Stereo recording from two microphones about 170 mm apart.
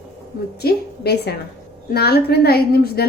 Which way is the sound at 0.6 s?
70° left (ahead or behind).